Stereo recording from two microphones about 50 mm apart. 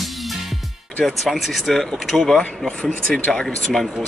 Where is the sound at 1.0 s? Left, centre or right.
Centre.